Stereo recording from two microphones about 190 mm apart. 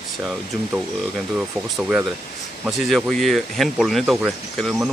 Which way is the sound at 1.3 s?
5° right (ahead or behind).